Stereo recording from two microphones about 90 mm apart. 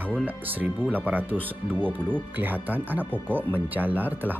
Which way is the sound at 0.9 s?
20° right (ahead or behind).